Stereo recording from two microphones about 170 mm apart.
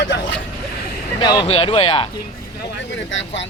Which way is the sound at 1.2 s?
25° left (ahead or behind).